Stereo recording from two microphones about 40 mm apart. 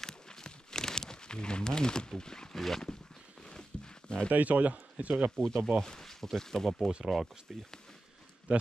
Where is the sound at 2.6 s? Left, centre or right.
Centre.